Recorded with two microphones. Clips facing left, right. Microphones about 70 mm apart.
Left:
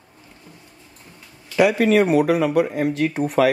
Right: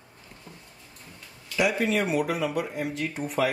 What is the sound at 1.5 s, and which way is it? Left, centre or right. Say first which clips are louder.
Speech: left 9 dB; left.